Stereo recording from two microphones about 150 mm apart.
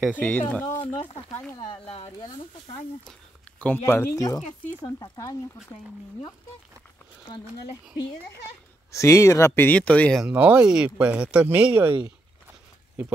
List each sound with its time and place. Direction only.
0.1 s speech: 10° left (ahead or behind)
1.7 s speech: 40° left (ahead or behind)
2.1 s speech: 25° left (ahead or behind)
3.1 s speech: 10° left (ahead or behind); by 5.4 s 25° left (ahead or behind)
8.9 s speech: 20° left (ahead or behind)
10.2 s speech: 10° right (ahead or behind)